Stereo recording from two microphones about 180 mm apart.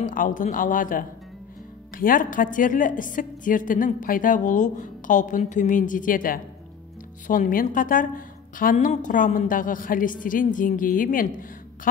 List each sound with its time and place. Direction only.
0.0 s a woman's voice: 50° left (ahead or behind)